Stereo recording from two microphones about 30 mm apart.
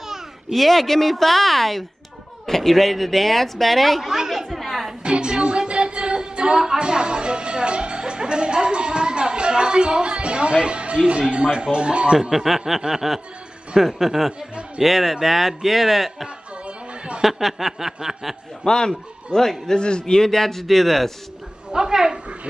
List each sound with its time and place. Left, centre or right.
0.5 s a woman's voice: centre
4.6 s music: centre
5.0 s music: right
6.8 s music: right
11.5 s speech: right
12.2 s speech: centre
16.6 s music: right
17.2 s speech: centre
18.6 s a man's voice: left
20.2 s a woman's voice: centre
21.7 s a woman's voice: right